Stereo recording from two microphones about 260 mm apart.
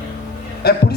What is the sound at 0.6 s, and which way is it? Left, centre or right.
Speech, left.